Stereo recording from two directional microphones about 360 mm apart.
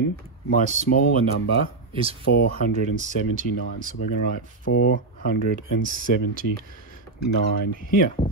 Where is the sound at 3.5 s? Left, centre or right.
Left.